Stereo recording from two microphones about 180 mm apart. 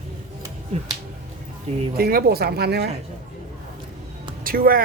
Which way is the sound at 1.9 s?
55° right (ahead or behind).